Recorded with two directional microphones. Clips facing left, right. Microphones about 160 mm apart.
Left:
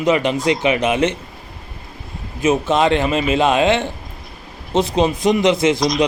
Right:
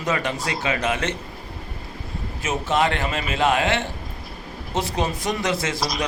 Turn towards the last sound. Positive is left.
turn(degrees=-5)  # may be behind; listen again after turning